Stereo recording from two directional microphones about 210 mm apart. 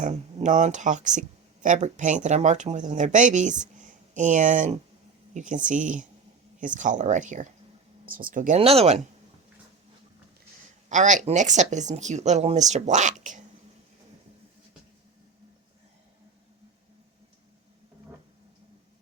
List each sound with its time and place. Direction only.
0.0 s speech: 35° right (ahead or behind)
10.8 s speech: 35° right (ahead or behind)